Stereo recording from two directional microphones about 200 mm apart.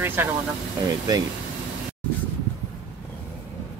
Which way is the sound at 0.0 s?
10° right (ahead or behind).